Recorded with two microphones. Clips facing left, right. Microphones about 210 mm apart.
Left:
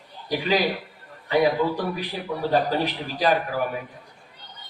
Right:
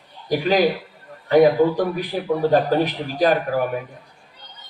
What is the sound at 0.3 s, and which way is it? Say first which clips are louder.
A man's voice: right 5 dB; 45° right (ahead or behind).